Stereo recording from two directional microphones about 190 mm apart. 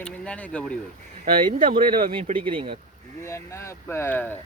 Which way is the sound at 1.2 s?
45° right (ahead or behind).